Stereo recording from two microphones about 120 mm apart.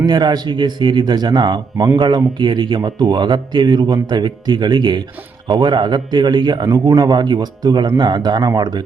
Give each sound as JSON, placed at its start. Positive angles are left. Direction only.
{"t": 0.0, "sound": "a man's voice", "side_deg": -35}